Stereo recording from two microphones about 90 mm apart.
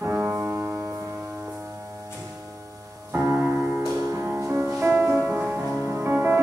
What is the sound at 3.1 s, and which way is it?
Music, 30° right (ahead or behind).